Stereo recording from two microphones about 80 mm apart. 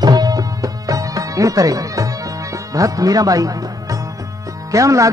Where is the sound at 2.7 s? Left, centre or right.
Right.